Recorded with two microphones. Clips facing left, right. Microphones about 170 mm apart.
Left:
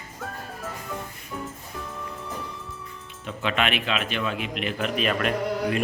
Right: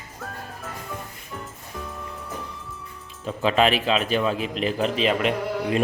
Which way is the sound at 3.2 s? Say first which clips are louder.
Right 6 dB; 35° right (ahead or behind).